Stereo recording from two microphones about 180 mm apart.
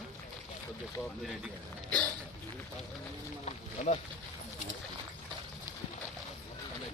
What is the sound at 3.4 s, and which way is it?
Speech, 40° left (ahead or behind).